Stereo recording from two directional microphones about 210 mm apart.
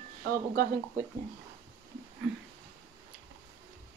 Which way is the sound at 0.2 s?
50° right (ahead or behind).